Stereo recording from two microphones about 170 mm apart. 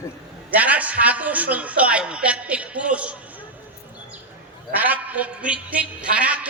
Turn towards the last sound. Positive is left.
turn(degrees=-10)  # may be behind; listen again after turning